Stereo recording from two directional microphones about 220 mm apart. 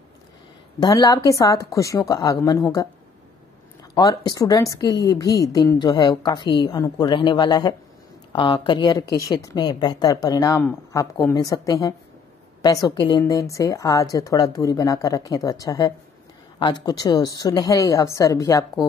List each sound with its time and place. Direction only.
0.7 s a woman's voice: 15° left (ahead or behind)
3.9 s a woman's voice: 15° left (ahead or behind)